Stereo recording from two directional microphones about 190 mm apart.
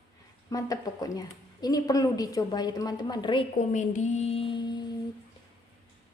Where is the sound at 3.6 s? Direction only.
40° left (ahead or behind); by 4.8 s 25° left (ahead or behind).